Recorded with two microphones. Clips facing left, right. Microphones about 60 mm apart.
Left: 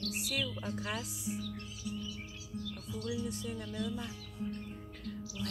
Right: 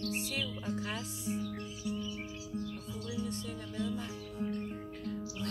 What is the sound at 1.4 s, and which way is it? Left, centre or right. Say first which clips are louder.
Music: right 3 dB; right.